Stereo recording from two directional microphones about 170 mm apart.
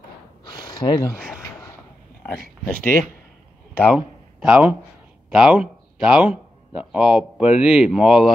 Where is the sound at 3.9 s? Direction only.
5° right (ahead or behind).